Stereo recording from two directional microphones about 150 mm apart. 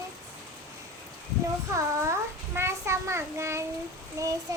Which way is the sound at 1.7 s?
20° right (ahead or behind).